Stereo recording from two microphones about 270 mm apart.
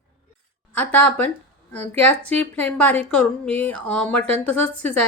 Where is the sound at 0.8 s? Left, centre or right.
Centre.